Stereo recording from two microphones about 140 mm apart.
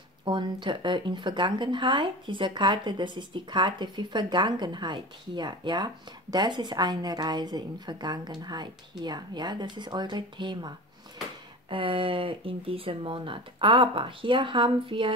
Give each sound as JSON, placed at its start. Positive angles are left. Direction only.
{"t": 0.2, "sound": "a woman's voice", "side_deg": -35}
{"t": 11.7, "sound": "speech", "side_deg": -40}